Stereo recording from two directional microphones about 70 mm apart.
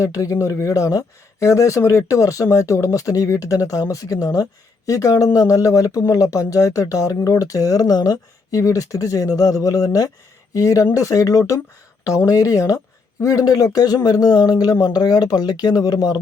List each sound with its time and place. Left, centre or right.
0.0 s speech: left